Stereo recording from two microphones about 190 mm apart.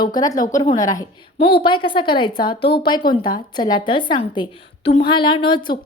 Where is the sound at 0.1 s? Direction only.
20° left (ahead or behind).